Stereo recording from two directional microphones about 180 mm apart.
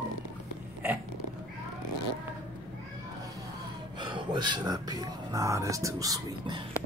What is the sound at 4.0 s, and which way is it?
Speech, 25° right (ahead or behind).